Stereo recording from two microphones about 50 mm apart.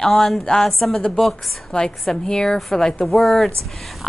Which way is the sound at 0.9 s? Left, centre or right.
Centre.